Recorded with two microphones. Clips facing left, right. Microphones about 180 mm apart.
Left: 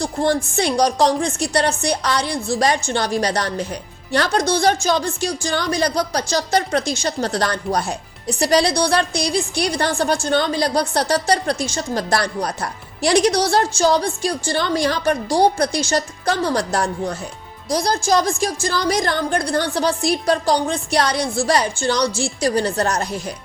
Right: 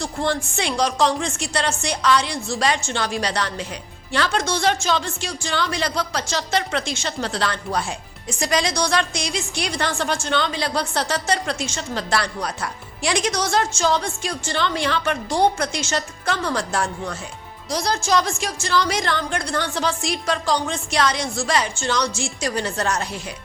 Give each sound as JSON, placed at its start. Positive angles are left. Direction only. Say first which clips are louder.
{"t": 0.0, "sound": "a woman's voice", "louder": "left 5 dB", "side_deg": 40}